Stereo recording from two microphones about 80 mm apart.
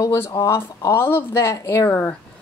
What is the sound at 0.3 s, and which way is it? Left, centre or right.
Speech, left.